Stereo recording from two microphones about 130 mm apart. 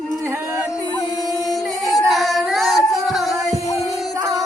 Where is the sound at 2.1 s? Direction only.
Centre (ahead or behind).